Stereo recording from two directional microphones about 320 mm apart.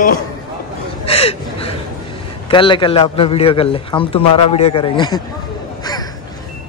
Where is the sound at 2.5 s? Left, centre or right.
Centre.